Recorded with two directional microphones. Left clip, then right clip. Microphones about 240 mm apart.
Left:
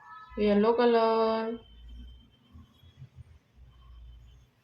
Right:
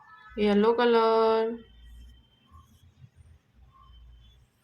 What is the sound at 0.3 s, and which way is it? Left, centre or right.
Speech, right.